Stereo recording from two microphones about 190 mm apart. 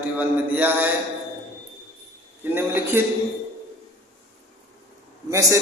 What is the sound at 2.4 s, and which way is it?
Speech, 10° right (ahead or behind).